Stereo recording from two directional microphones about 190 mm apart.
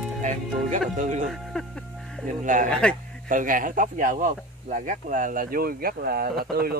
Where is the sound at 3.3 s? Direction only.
45° right (ahead or behind).